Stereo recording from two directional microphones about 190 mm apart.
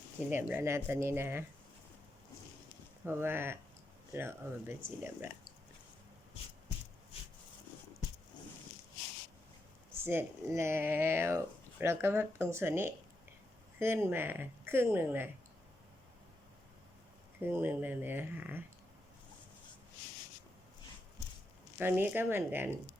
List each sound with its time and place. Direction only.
0.3 s speech: 10° right (ahead or behind)
3.0 s speech: 10° right (ahead or behind)
7.1 s a sound: 30° left (ahead or behind)
10.0 s speech: 10° right (ahead or behind)
17.4 s speech: 10° right (ahead or behind)
21.8 s speech: 10° right (ahead or behind)